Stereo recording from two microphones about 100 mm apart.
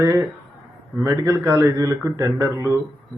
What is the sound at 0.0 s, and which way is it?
A man's voice, 30° right (ahead or behind).